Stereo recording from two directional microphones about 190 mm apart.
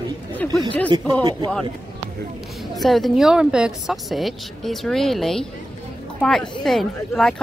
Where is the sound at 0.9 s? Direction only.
25° right (ahead or behind).